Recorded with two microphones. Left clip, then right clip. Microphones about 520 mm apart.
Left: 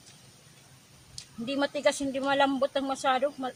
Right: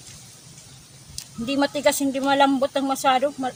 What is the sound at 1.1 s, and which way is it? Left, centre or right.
Speech, left.